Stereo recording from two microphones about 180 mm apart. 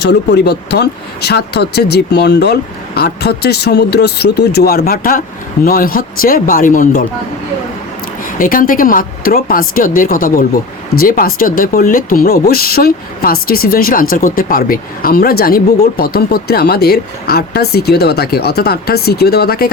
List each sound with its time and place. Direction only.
0.0 s speech: 65° left (ahead or behind); by 7.0 s 50° left (ahead or behind)
8.4 s speech: 50° left (ahead or behind)